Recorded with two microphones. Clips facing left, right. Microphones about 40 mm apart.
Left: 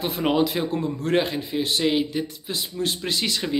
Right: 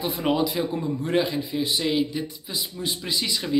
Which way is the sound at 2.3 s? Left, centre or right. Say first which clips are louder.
Left 2 dB; left.